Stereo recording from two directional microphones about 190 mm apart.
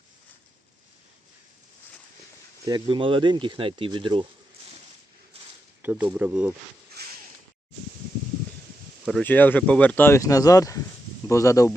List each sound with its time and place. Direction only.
2.6 s speech: 25° right (ahead or behind)
5.8 s speech: 5° right (ahead or behind)
7.0 s a sound: 60° right (ahead or behind)
9.0 s speech: 5° left (ahead or behind)